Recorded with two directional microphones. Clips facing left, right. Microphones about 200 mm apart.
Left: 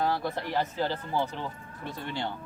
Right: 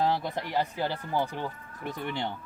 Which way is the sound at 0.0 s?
20° right (ahead or behind).